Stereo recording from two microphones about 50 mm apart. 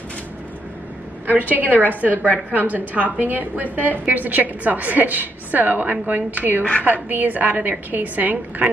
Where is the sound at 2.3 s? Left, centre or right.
Right.